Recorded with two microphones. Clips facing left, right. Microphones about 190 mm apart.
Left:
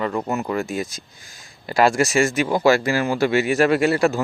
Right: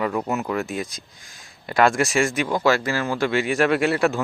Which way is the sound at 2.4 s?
10° left (ahead or behind).